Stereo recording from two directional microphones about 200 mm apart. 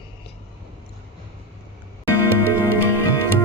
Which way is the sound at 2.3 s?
90° right.